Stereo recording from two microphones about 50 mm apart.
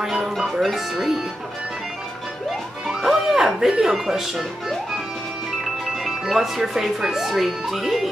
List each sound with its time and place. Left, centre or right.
0.0 s speech: centre
2.9 s speech: centre
6.0 s speech: centre